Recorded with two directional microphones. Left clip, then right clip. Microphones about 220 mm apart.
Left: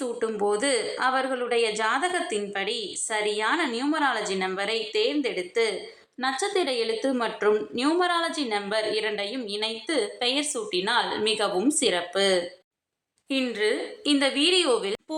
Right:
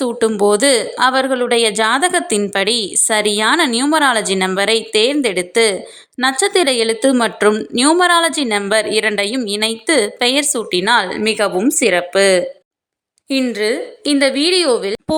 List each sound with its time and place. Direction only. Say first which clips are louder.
0.0 s a woman's voice: right 12 dB; 45° right (ahead or behind)